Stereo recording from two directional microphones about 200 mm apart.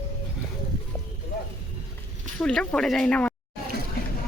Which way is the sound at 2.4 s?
5° left (ahead or behind).